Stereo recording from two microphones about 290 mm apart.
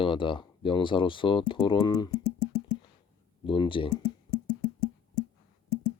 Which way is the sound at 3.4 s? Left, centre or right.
Centre.